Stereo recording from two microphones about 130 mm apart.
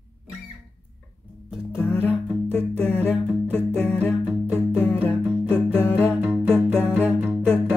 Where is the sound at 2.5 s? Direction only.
15° left (ahead or behind).